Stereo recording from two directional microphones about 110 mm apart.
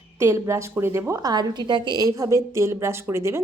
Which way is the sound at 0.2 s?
25° right (ahead or behind).